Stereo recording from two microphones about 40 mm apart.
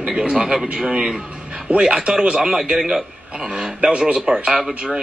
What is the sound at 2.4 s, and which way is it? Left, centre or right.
Speech, centre.